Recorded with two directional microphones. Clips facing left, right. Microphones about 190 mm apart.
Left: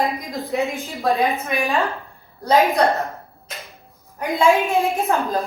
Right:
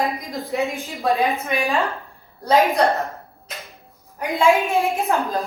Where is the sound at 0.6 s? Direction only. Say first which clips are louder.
Even; centre (ahead or behind).